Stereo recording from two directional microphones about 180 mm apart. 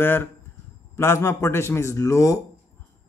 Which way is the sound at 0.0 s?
10° left (ahead or behind).